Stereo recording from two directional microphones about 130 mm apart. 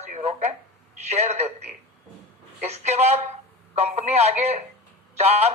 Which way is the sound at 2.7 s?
55° right (ahead or behind).